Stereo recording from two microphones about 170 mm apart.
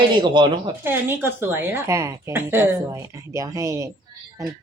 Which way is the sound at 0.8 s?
15° right (ahead or behind).